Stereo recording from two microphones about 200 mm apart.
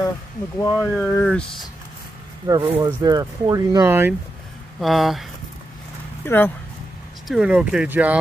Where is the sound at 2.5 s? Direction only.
25° right (ahead or behind).